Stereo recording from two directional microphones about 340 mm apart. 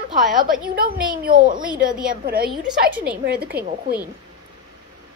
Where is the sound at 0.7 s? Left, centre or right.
Right.